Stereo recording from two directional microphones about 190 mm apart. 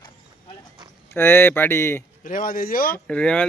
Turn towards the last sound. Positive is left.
turn(degrees=5)  # may be behind; listen again after turning